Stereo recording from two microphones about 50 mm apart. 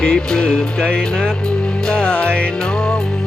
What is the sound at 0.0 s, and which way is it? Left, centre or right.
Music, centre.